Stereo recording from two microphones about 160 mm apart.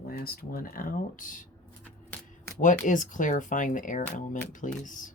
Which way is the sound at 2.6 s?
55° left (ahead or behind).